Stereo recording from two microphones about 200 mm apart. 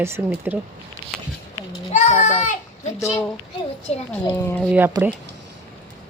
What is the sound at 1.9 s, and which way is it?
A child's voice, 35° left (ahead or behind).